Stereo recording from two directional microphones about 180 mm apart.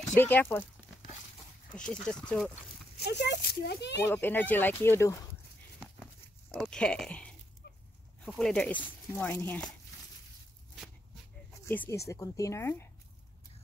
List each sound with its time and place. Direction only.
0.2 s speech: 10° left (ahead or behind)
1.7 s speech: 5° left (ahead or behind)
3.1 s a child's voice: 70° left (ahead or behind)
4.1 s speech: 10° left (ahead or behind)
6.5 s speech: 5° left (ahead or behind)
8.3 s speech: 5° left (ahead or behind)
11.6 s speech: 10° left (ahead or behind)